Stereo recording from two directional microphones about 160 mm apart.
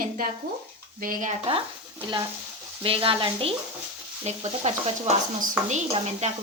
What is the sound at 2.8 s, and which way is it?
Speech, 35° right (ahead or behind).